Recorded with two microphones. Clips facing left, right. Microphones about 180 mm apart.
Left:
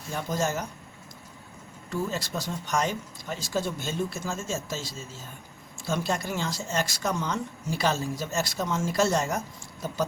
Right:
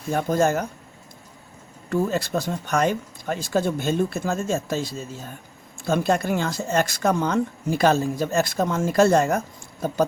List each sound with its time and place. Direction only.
0.1 s speech: 55° right (ahead or behind)
1.9 s speech: 55° right (ahead or behind)